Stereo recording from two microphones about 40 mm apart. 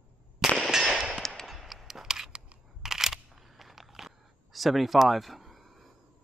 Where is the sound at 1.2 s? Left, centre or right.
Centre.